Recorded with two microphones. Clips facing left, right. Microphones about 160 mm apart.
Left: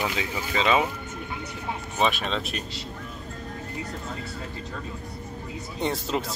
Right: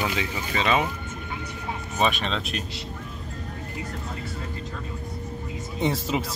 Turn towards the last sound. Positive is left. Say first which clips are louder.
# right 2 dB
turn(degrees=0)  # may be behind; listen again after turning